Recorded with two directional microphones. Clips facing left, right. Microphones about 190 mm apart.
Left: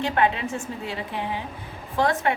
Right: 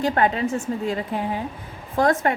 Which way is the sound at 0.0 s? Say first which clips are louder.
Right 2 dB; 40° right (ahead or behind).